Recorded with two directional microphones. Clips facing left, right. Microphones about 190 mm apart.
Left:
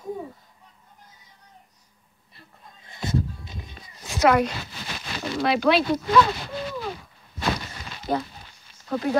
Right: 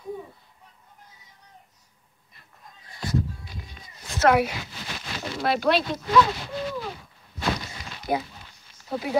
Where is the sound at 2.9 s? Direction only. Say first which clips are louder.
Left 1 dB; 25° left (ahead or behind).